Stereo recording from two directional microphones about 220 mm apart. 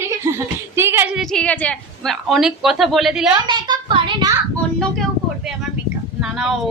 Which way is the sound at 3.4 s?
20° right (ahead or behind).